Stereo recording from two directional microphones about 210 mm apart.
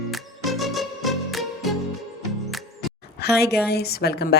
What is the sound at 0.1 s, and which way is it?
Music, centre (ahead or behind).